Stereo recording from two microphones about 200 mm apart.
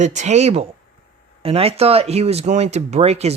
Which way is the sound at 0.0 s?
35° right (ahead or behind).